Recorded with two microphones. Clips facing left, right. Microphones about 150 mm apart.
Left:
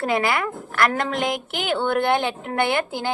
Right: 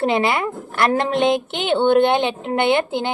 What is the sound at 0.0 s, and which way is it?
Speech, 25° right (ahead or behind).